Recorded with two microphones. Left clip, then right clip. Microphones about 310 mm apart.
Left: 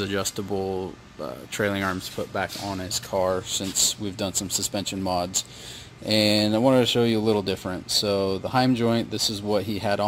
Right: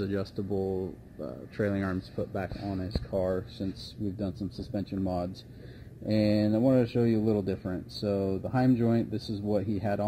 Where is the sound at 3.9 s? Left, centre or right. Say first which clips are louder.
Left 8 dB; centre.